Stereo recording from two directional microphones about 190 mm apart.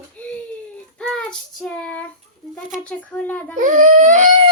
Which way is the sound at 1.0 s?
5° left (ahead or behind).